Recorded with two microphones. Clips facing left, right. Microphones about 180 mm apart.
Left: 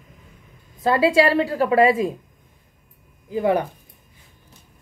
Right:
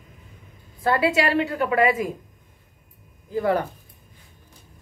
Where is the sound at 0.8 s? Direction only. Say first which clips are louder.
Left 4 dB; 25° left (ahead or behind).